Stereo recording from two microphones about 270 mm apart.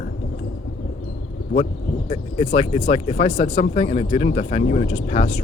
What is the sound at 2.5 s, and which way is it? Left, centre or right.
Speech, left.